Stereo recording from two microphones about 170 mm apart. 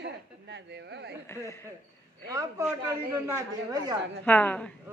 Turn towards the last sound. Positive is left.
turn(degrees=10)  # may be behind; listen again after turning